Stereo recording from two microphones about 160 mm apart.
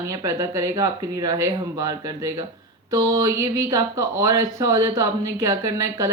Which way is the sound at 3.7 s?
20° right (ahead or behind).